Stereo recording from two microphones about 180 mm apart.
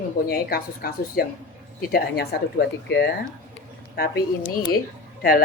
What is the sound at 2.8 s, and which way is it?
Speech, 70° left (ahead or behind).